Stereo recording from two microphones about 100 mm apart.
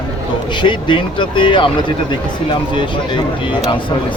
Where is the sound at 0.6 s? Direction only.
55° left (ahead or behind).